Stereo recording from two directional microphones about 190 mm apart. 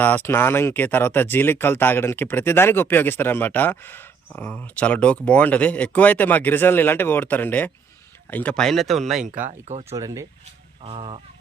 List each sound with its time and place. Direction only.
0.0 s speech: 10° left (ahead or behind)
9.4 s speech: 35° right (ahead or behind)
9.9 s speech: 15° right (ahead or behind)
10.8 s speech: 30° right (ahead or behind)